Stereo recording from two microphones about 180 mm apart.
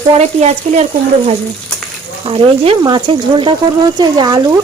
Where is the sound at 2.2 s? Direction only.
25° right (ahead or behind).